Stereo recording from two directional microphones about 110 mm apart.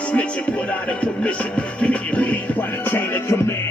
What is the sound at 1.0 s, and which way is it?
Music, 10° left (ahead or behind).